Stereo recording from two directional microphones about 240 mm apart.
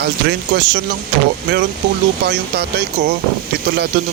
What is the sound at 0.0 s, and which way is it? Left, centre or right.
Speech, right.